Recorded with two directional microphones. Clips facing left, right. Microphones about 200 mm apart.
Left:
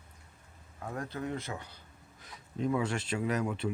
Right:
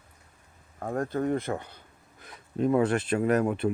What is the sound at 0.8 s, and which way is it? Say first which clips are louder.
Speech: right 9 dB; 50° right (ahead or behind).